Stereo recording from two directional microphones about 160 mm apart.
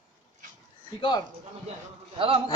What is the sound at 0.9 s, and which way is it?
Speech, 25° left (ahead or behind).